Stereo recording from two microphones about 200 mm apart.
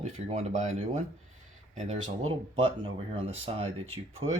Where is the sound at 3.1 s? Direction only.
30° right (ahead or behind).